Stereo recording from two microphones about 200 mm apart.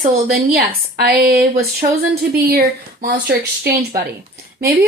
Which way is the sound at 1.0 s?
50° right (ahead or behind).